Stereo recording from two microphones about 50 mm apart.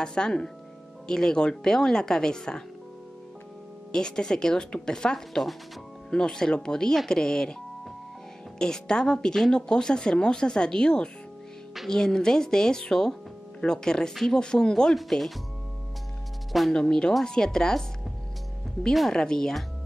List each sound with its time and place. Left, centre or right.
0.0 s a woman's voice: centre
3.9 s a woman's voice: centre
8.5 s a woman's voice: centre
16.7 s a woman's voice: centre
18.9 s a woman's voice: centre